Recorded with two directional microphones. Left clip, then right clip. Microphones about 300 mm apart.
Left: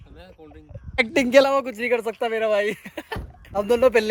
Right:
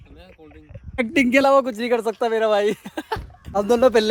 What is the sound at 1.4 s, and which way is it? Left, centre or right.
Speech, centre.